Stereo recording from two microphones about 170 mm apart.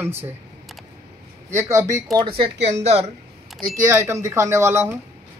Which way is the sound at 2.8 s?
40° right (ahead or behind).